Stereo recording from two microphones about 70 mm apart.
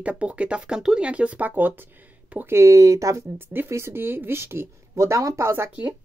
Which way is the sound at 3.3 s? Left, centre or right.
Right.